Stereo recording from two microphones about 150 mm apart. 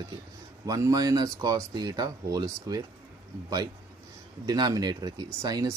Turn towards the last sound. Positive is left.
turn(degrees=-25)  # may be behind; listen again after turning